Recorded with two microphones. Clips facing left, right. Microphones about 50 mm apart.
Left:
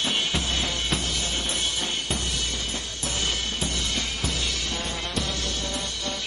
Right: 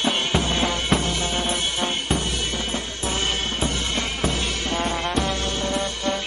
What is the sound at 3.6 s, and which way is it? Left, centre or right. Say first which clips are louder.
Music: right 4 dB; right.